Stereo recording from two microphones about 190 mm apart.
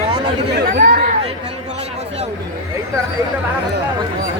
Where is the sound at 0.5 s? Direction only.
55° right (ahead or behind).